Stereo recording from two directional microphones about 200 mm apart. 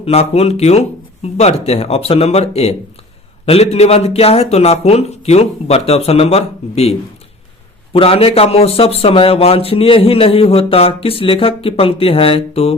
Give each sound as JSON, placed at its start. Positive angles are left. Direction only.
{"t": 0.0, "sound": "speech", "side_deg": 30}
{"t": 7.9, "sound": "speech", "side_deg": 30}